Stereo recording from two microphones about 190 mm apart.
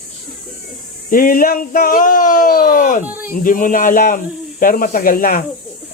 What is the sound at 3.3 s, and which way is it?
Speech, 45° left (ahead or behind).